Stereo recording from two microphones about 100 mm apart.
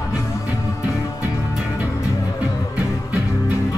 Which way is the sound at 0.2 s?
30° left (ahead or behind).